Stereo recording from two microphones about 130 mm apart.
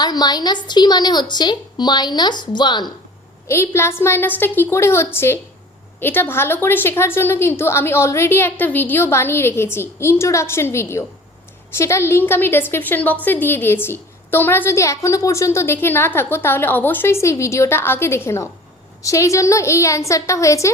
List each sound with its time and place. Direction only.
0.0 s a woman's voice: 30° left (ahead or behind)
3.5 s a woman's voice: 20° left (ahead or behind)